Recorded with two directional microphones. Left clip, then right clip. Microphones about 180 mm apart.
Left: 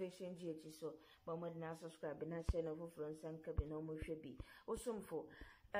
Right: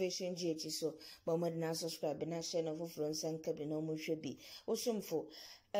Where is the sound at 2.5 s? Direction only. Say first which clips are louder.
Right 5 dB; 5° right (ahead or behind).